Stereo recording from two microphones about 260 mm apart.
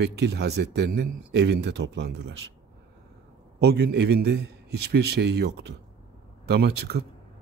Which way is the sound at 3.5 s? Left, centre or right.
Right.